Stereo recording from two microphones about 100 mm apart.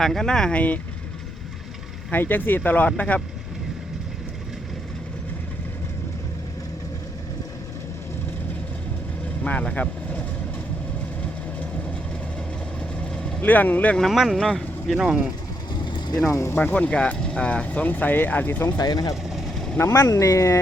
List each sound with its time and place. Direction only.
0.0 s speech: 5° left (ahead or behind)
2.0 s speech: 20° left (ahead or behind)
9.4 s speech: 10° left (ahead or behind)
13.4 s speech: 20° left (ahead or behind)
14.0 s speech: centre (ahead or behind)
15.7 s mechanisms: 50° left (ahead or behind)
16.3 s speech: 25° left (ahead or behind)
18.8 s speech: 40° left (ahead or behind)
19.7 s speech: 30° left (ahead or behind)